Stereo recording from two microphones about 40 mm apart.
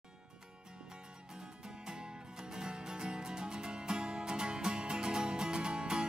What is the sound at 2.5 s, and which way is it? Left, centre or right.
Music, centre.